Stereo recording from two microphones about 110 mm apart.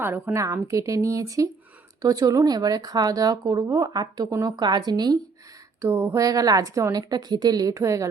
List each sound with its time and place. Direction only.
0.0 s a woman's voice: 20° right (ahead or behind); by 5.1 s 40° right (ahead or behind)
5.8 s a woman's voice: 20° right (ahead or behind)
6.2 s speech: 35° right (ahead or behind)